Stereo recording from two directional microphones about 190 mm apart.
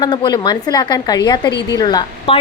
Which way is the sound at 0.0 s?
20° left (ahead or behind).